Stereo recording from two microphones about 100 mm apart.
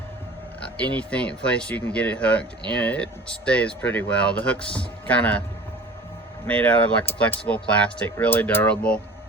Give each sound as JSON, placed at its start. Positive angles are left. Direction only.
{"t": 0.6, "sound": "speech", "side_deg": 15}
{"t": 6.5, "sound": "speech", "side_deg": 15}